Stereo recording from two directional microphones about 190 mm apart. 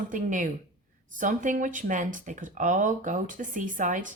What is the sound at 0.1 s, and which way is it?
Speech, 40° right (ahead or behind).